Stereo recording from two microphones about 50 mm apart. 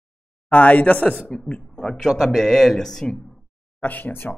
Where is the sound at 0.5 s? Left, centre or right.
Left.